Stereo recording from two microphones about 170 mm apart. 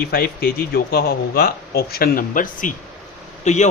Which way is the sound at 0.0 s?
65° left (ahead or behind).